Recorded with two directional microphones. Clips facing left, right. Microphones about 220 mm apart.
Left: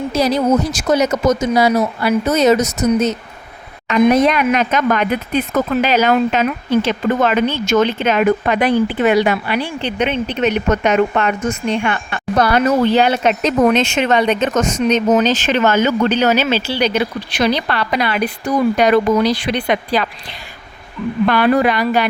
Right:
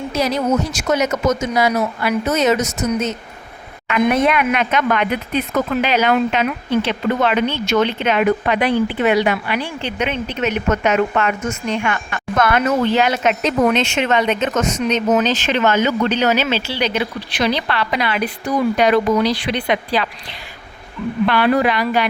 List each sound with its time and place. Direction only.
0.1 s speech: 35° left (ahead or behind)
21.2 s speech: 45° left (ahead or behind)